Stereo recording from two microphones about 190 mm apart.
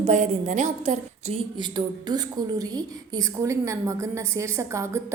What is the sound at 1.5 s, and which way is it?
A woman's voice, 25° right (ahead or behind).